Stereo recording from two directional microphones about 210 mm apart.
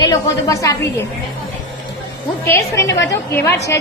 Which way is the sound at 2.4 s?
15° left (ahead or behind).